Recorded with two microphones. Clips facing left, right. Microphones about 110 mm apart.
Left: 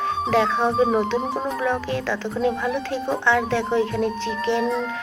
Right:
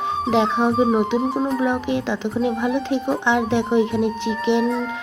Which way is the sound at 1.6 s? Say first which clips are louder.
Right 3 dB; 15° right (ahead or behind).